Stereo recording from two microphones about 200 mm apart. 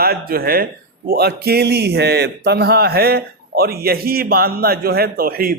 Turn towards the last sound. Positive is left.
turn(degrees=-45)  # may be behind; listen again after turning